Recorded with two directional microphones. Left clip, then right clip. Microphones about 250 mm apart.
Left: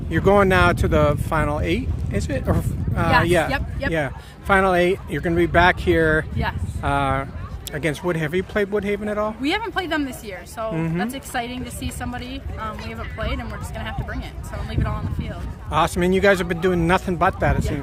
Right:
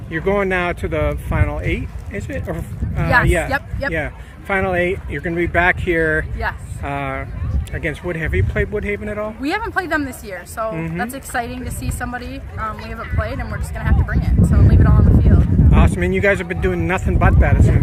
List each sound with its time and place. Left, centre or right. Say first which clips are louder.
0.1 s speech: left 2 dB; centre
3.5 s a woman's voice: right 4 dB; centre
3.9 s speech: right 1 dB; centre
10.7 s speech: right 1 dB; centre
11.0 s a woman's voice: right 3 dB; centre
15.7 s speech: left 2 dB; centre